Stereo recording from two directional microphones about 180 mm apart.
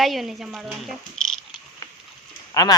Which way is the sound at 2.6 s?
20° left (ahead or behind).